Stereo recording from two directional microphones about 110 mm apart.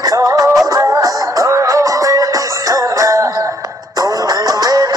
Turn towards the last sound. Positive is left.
turn(degrees=-35)  # may be behind; listen again after turning